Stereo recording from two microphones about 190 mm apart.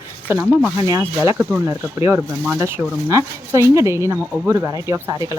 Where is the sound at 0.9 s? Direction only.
15° right (ahead or behind).